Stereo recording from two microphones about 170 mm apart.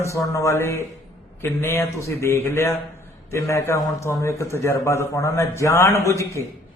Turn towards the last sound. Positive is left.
turn(degrees=15)  # may be behind; listen again after turning